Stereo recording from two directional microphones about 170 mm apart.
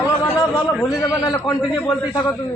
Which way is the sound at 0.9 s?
15° left (ahead or behind).